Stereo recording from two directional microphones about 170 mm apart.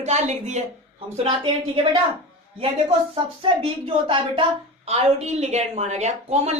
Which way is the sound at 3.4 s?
30° right (ahead or behind).